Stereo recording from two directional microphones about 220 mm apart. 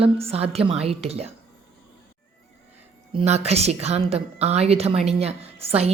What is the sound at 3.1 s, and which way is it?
A woman's voice, 30° right (ahead or behind).